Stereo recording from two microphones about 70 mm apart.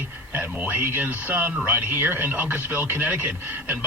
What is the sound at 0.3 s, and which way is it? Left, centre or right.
Speech, right.